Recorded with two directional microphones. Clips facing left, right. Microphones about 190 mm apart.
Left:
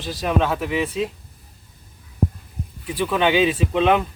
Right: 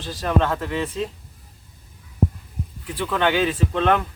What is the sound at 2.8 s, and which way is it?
Speech, 15° left (ahead or behind).